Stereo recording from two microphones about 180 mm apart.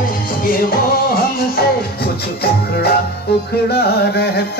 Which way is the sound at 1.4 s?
60° left (ahead or behind).